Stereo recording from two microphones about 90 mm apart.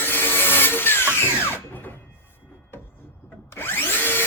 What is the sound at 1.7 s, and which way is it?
Music, 20° left (ahead or behind).